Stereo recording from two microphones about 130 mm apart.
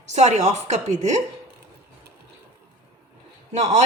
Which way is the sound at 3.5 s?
60° right (ahead or behind).